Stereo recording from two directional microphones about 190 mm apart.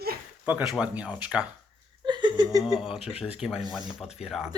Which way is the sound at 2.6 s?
Centre (ahead or behind).